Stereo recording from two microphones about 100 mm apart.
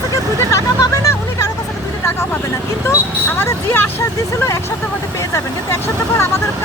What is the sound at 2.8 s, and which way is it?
Speech, 25° left (ahead or behind).